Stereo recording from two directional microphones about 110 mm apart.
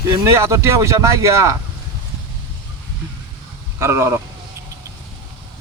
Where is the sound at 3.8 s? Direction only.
25° right (ahead or behind).